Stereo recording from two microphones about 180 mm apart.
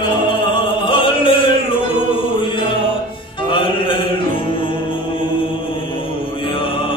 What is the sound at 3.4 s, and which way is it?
Music, 30° left (ahead or behind).